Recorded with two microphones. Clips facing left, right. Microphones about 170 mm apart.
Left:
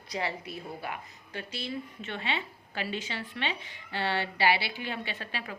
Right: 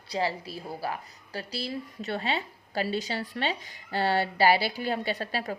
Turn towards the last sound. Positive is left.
turn(degrees=-40)  # may be behind; listen again after turning